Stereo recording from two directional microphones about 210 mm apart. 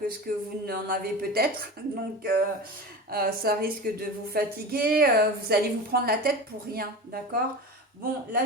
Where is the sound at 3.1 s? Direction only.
45° right (ahead or behind).